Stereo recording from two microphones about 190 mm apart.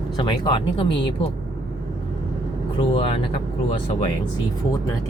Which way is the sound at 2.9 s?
30° left (ahead or behind).